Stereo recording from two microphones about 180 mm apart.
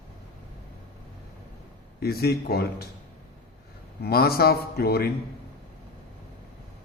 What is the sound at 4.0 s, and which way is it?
A man's voice, 60° left (ahead or behind).